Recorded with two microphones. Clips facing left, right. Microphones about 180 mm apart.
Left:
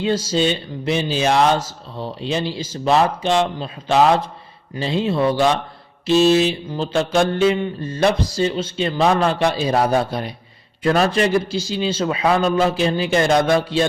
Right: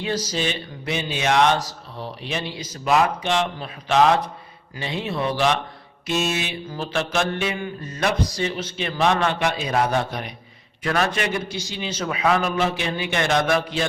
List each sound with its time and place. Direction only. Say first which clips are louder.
0.0 s a man's voice: left 6 dB; 25° left (ahead or behind)
6.1 s mantra: left 10 dB; 35° left (ahead or behind)
10.8 s a man's voice: left 6 dB; 30° left (ahead or behind)